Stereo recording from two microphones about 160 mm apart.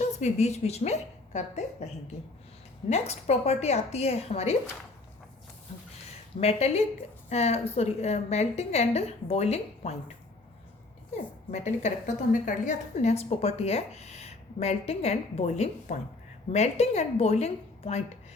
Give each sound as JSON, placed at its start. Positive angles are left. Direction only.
{"t": 0.0, "sound": "a woman's voice", "side_deg": 45}
{"t": 2.9, "sound": "a woman's voice", "side_deg": 40}
{"t": 6.4, "sound": "a woman's voice", "side_deg": 40}
{"t": 11.5, "sound": "a woman's voice", "side_deg": 45}